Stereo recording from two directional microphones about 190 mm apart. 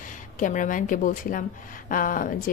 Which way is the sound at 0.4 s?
45° left (ahead or behind).